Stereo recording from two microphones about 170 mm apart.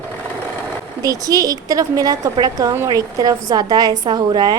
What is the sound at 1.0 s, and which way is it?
A woman's voice, 20° right (ahead or behind).